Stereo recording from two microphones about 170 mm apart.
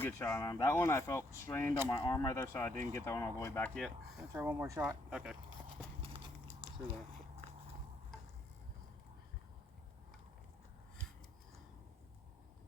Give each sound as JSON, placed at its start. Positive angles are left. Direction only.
{"t": 0.0, "sound": "speech", "side_deg": 15}
{"t": 3.8, "sound": "speech", "side_deg": 0}
{"t": 4.3, "sound": "speech", "side_deg": -10}